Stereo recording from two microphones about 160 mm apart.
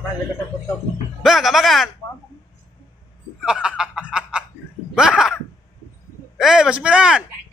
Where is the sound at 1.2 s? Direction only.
Centre (ahead or behind).